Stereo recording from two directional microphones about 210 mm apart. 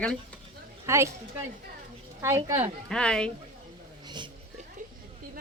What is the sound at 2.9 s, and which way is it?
Speech, 5° left (ahead or behind).